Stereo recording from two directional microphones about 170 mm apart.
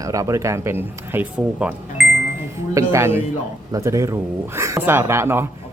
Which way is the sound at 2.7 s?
20° right (ahead or behind).